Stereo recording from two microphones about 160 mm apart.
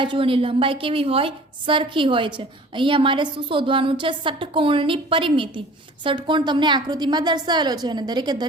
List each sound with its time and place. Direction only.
0.0 s a woman's voice: 30° right (ahead or behind)